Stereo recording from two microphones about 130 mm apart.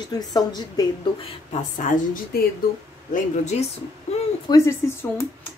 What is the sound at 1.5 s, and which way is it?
Speech, 75° left (ahead or behind).